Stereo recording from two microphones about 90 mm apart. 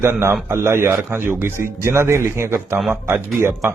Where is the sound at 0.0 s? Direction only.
30° right (ahead or behind).